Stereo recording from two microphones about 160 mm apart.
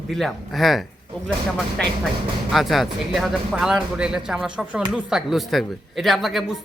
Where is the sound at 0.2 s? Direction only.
Centre (ahead or behind).